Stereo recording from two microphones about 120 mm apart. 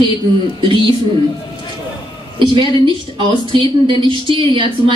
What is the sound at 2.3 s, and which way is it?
A woman's voice, 45° right (ahead or behind).